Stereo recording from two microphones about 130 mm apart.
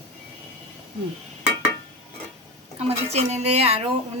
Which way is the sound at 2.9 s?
55° right (ahead or behind).